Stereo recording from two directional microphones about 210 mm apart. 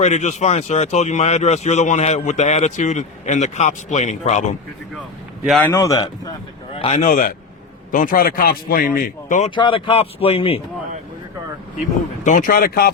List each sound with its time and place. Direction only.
0.0 s a man's voice: 35° left (ahead or behind)
5.5 s speech: 5° left (ahead or behind)
6.7 s a man's voice: 30° left (ahead or behind)
9.6 s speech: 25° left (ahead or behind)
12.2 s speech: 40° left (ahead or behind)